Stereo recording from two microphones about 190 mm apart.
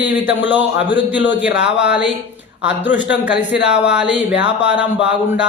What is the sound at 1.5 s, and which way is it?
Speech, 65° left (ahead or behind).